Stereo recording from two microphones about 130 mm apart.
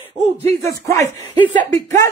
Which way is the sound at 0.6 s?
25° left (ahead or behind).